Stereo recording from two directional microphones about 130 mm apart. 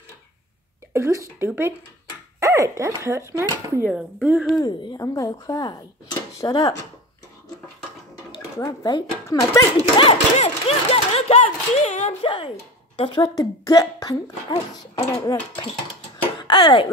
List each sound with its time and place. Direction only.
0.9 s speech: 20° right (ahead or behind)
2.4 s dog: 25° right (ahead or behind)
3.0 s speech: 25° right (ahead or behind)
3.9 s speech: 10° right (ahead or behind)
4.6 s speech: 30° left (ahead or behind)
8.3 s speech: 30° left (ahead or behind)
9.8 s speech: 45° left (ahead or behind); by 12.2 s 65° left (ahead or behind)
12.2 s speech: 40° left (ahead or behind)
13.2 s speech: 30° left (ahead or behind)
16.3 s speech: 35° left (ahead or behind)